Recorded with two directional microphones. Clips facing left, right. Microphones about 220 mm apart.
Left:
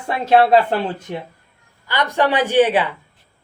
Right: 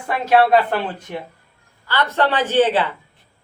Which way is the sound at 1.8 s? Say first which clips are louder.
Left 1 dB; 15° left (ahead or behind).